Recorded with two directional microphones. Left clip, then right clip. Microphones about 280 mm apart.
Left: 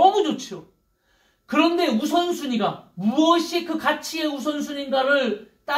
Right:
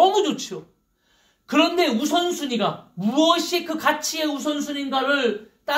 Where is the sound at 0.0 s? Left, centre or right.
Right.